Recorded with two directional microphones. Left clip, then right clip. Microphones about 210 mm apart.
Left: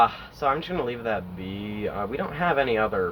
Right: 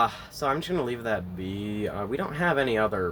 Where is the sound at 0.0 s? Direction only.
50° right (ahead or behind).